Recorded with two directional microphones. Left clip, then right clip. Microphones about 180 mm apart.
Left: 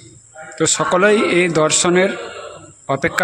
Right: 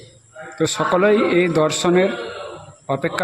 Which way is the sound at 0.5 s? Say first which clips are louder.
Left 2 dB; centre (ahead or behind).